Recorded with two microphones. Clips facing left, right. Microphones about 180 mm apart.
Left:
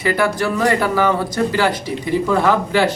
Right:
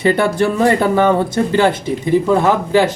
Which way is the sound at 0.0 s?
25° right (ahead or behind).